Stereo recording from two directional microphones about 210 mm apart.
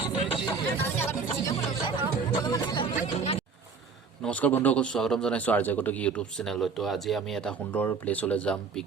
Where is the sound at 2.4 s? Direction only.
20° left (ahead or behind).